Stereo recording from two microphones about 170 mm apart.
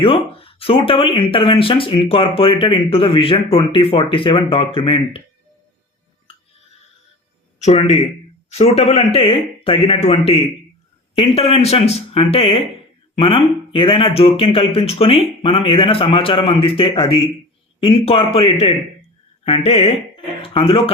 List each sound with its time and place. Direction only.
0.0 s speech: 35° left (ahead or behind)
8.4 s speech: 40° left (ahead or behind)